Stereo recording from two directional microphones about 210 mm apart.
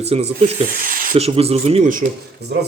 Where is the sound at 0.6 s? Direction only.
40° right (ahead or behind).